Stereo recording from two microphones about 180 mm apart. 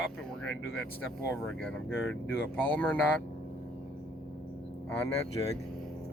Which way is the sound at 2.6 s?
10° left (ahead or behind).